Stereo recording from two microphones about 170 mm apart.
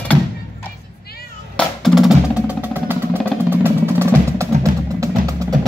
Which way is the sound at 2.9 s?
10° right (ahead or behind).